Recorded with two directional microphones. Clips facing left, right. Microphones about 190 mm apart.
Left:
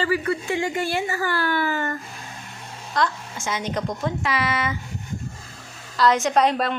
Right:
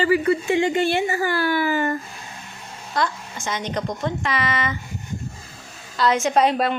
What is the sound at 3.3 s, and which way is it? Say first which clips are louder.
A woman's voice: even; 5° left (ahead or behind).